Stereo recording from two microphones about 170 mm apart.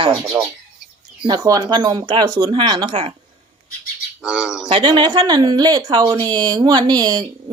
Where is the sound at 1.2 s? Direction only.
25° right (ahead or behind).